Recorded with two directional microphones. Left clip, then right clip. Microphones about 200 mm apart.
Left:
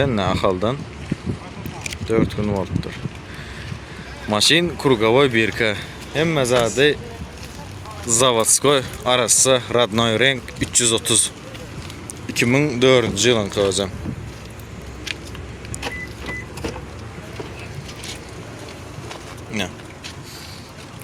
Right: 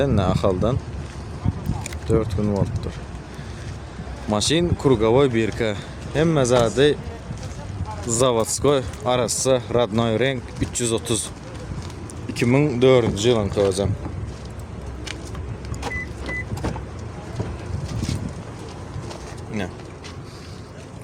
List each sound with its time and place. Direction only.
0.0 s speech: centre (ahead or behind)
2.0 s speech: centre (ahead or behind)
4.3 s speech: 5° right (ahead or behind)
6.1 s speech: 15° right (ahead or behind)
8.0 s speech: 5° right (ahead or behind)
12.3 s speech: 5° right (ahead or behind)
19.5 s a sound: 5° right (ahead or behind)